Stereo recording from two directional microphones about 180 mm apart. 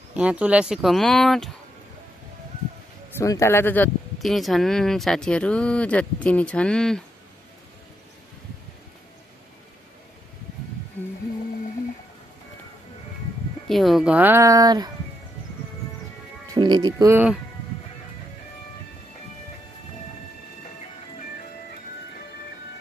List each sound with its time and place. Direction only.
0.1 s speech: 5° right (ahead or behind)
3.2 s speech: 15° left (ahead or behind)
13.7 s speech: centre (ahead or behind); by 14.9 s 20° right (ahead or behind)
16.5 s speech: 25° right (ahead or behind)
17.1 s speech: 10° right (ahead or behind)